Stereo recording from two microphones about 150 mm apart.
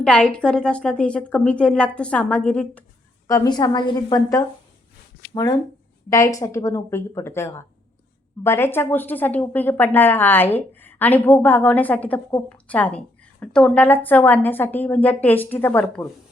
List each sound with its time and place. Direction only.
0.0 s a woman's voice: 5° left (ahead or behind)
3.2 s a woman's voice: 25° left (ahead or behind); by 16.0 s 5° left (ahead or behind)